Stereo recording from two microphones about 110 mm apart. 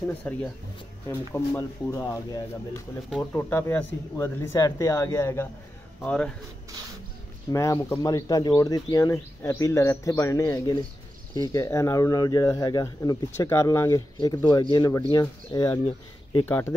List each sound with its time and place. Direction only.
0.0 s speech: 15° left (ahead or behind)
1.0 s speech: 30° left (ahead or behind)
6.0 s speech: 10° left (ahead or behind)
7.5 s speech: 30° left (ahead or behind)
16.4 s speech: 20° left (ahead or behind)